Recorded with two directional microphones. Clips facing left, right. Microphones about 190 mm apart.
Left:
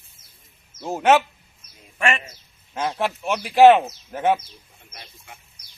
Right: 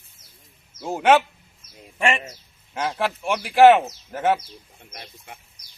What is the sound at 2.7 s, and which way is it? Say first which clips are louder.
Speech: even; 5° right (ahead or behind).